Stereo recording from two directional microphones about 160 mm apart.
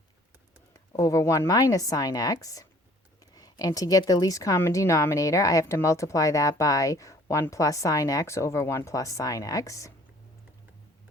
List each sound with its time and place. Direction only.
0.7 s a woman's voice: 20° left (ahead or behind)